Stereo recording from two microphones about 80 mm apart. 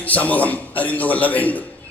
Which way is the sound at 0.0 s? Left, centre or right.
Centre.